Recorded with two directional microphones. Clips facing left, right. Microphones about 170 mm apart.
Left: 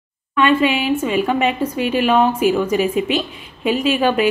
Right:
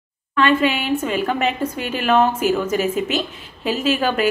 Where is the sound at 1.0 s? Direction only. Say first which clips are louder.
Left 4 dB; 10° left (ahead or behind).